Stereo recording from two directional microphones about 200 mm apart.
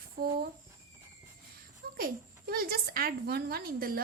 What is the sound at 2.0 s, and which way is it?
A woman's voice, 45° right (ahead or behind).